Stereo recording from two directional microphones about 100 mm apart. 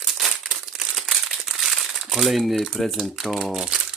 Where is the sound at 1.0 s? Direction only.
Centre (ahead or behind).